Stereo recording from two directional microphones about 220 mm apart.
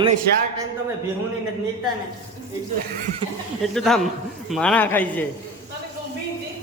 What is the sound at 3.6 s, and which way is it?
A man's voice, centre (ahead or behind).